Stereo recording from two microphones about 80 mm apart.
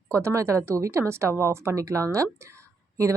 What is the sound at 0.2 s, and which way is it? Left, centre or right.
Speech, right.